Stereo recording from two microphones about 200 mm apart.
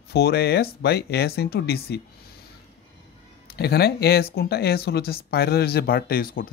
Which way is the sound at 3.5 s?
50° left (ahead or behind).